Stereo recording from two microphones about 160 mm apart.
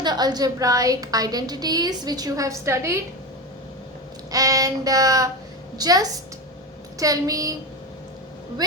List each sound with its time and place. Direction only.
0.0 s a woman's voice: 25° right (ahead or behind)
4.3 s child singing: 20° right (ahead or behind)
5.7 s a woman's voice: 25° right (ahead or behind)